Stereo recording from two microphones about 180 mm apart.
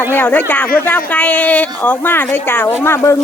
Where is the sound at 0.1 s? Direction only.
10° left (ahead or behind).